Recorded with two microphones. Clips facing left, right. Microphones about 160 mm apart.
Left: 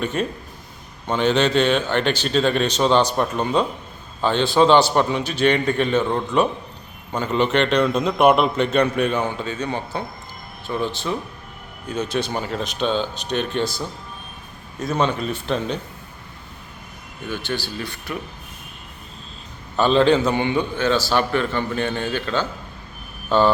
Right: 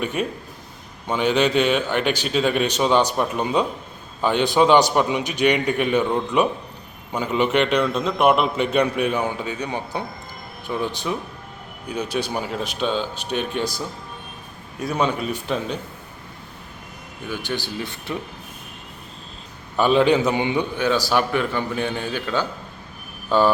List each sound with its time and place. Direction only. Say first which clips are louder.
0.0 s a man's voice: left 1 dB; 10° right (ahead or behind)
17.2 s a man's voice: left 1 dB; 10° right (ahead or behind)
19.7 s a man's voice: left 1 dB; 10° right (ahead or behind)